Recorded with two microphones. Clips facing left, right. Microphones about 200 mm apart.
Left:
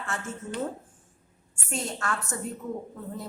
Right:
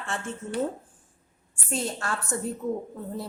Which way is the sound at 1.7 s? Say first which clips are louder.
Right 1 dB; 35° right (ahead or behind).